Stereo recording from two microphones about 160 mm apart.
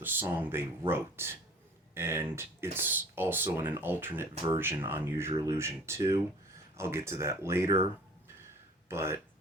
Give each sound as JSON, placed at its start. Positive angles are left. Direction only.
{"t": 0.0, "sound": "speech", "side_deg": -10}
{"t": 8.9, "sound": "speech", "side_deg": -15}